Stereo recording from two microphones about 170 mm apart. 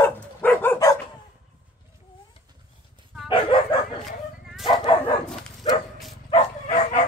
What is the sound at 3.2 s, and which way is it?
Dog, 30° left (ahead or behind).